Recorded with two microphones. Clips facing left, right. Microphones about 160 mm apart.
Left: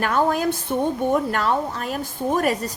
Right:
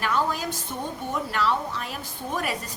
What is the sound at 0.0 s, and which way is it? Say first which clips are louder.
Speech: left 6 dB; 55° left (ahead or behind).